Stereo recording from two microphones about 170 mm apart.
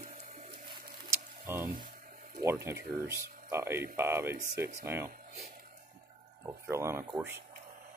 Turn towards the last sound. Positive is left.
turn(degrees=-15)  # may be behind; listen again after turning